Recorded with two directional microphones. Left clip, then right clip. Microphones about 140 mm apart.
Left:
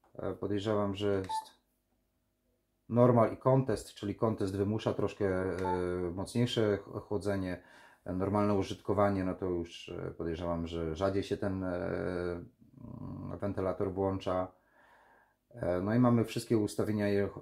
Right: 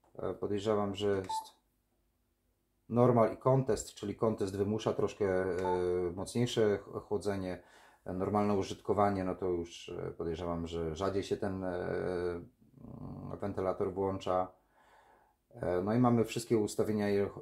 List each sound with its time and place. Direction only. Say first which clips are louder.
0.1 s speech: even; 40° left (ahead or behind)
2.9 s speech: left 1 dB; 35° left (ahead or behind)
15.6 s speech: left 1 dB; 35° left (ahead or behind)